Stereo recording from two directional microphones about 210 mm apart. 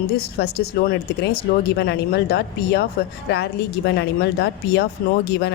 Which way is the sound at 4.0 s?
55° left (ahead or behind).